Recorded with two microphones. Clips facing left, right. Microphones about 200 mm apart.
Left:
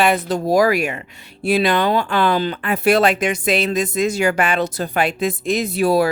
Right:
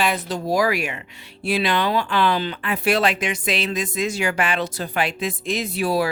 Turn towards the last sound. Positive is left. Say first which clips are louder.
# left 5 dB
turn(degrees=45)  # may be behind; listen again after turning